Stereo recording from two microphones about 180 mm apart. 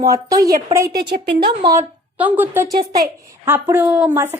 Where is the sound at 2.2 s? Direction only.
10° right (ahead or behind).